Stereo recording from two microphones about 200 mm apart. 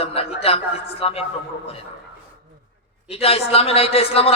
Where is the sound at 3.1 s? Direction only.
30° left (ahead or behind).